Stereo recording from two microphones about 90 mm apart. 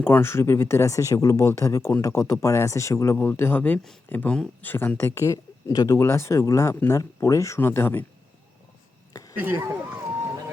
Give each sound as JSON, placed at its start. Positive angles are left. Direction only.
{"t": 0.0, "sound": "speech", "side_deg": 25}
{"t": 9.3, "sound": "speech", "side_deg": -20}